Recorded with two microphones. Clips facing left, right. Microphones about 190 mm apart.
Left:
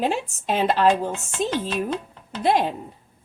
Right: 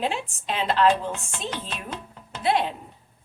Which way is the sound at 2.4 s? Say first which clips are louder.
Left 3 dB; 45° left (ahead or behind).